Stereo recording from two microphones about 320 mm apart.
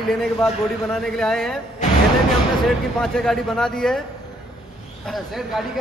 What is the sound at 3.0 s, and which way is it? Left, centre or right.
Speech, centre.